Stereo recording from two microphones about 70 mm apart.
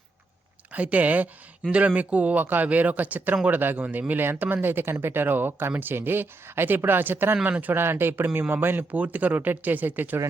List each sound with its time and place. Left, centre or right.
0.7 s speech: right